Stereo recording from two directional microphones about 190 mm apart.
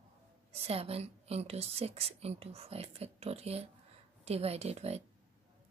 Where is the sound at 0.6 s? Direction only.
30° right (ahead or behind).